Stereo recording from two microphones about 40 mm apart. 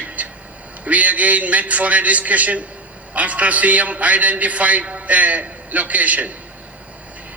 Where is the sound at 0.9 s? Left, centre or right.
Right.